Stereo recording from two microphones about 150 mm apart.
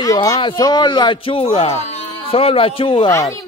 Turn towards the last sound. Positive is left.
turn(degrees=20)  # may be behind; listen again after turning